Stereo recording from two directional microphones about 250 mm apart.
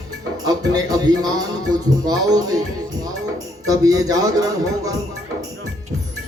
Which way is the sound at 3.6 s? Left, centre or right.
Centre.